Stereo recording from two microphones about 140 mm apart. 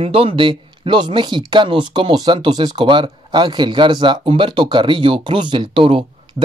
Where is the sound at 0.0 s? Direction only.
45° right (ahead or behind).